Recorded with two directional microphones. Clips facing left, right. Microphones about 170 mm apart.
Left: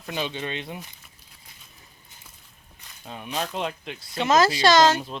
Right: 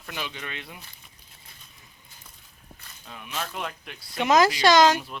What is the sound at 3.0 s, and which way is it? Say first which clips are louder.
Speech: left 5 dB; 35° left (ahead or behind).